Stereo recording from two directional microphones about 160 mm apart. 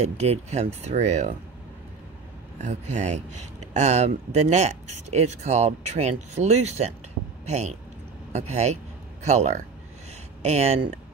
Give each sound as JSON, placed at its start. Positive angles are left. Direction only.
{"t": 0.0, "sound": "speech", "side_deg": -40}
{"t": 2.6, "sound": "speech", "side_deg": -45}